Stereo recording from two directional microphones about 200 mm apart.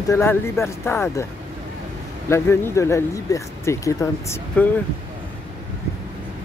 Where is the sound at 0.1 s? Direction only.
15° left (ahead or behind).